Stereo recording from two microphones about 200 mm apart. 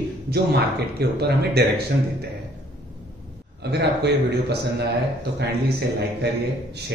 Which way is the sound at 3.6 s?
55° right (ahead or behind).